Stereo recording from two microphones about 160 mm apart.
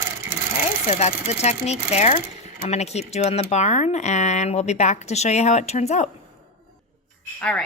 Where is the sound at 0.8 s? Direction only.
50° left (ahead or behind).